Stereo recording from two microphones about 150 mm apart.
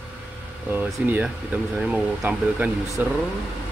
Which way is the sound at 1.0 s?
10° right (ahead or behind).